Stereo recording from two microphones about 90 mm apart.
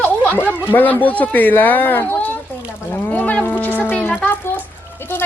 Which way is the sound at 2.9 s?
20° left (ahead or behind).